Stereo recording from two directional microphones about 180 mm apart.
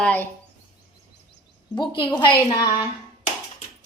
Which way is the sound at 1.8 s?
25° left (ahead or behind).